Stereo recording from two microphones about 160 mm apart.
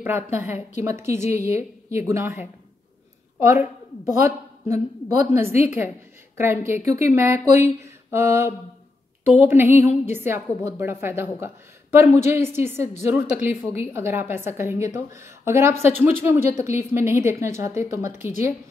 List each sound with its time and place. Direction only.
0.0 s speech: 15° right (ahead or behind)
1.4 s a woman's voice: 45° left (ahead or behind)
1.9 s a woman's voice: 15° right (ahead or behind)